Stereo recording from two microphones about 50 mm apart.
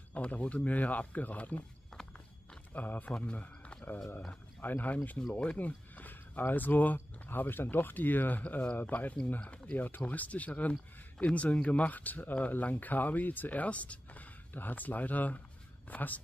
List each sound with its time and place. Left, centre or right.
0.1 s speech: left
2.7 s speech: left
3.1 s a man's voice: centre
3.3 s a sound: left
4.6 s speech: left
4.9 s speech: left
9.8 s speech: left